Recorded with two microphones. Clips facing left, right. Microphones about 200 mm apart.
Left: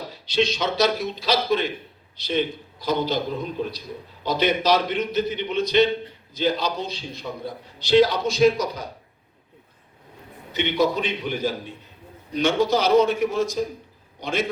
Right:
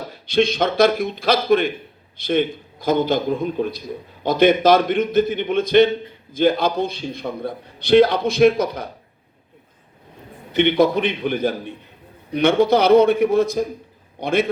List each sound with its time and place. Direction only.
0.1 s a man's voice: 55° right (ahead or behind)
10.5 s a man's voice: 55° right (ahead or behind)